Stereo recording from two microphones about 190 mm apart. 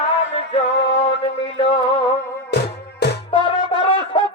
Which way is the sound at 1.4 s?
30° left (ahead or behind).